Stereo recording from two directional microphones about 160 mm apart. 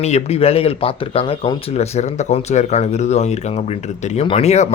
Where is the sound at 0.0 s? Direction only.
40° left (ahead or behind).